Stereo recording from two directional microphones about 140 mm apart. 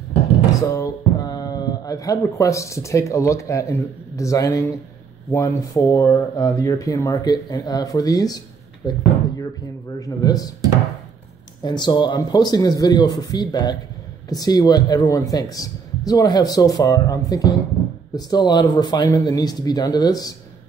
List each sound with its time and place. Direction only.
0.6 s speech: 25° left (ahead or behind)
11.6 s speech: 30° left (ahead or behind)